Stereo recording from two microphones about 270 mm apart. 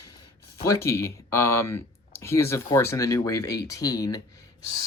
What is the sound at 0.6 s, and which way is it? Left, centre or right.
Speech, centre.